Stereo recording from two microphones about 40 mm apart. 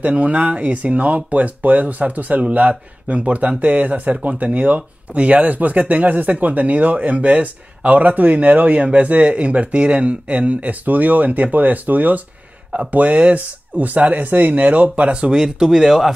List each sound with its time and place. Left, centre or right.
0.0 s speech: right; by 16.2 s centre